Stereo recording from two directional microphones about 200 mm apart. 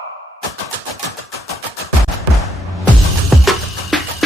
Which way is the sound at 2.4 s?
Centre (ahead or behind).